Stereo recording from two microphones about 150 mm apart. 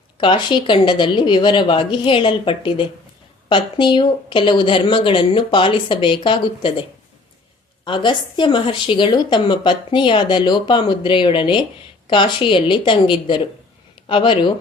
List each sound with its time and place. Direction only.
0.2 s a woman's voice: 35° left (ahead or behind)
7.9 s a woman's voice: 35° left (ahead or behind)